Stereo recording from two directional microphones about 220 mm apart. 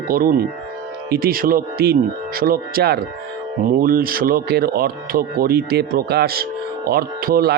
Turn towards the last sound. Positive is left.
turn(degrees=-45)  # may be behind; listen again after turning